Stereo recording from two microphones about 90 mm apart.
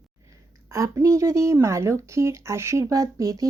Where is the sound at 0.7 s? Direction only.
35° right (ahead or behind).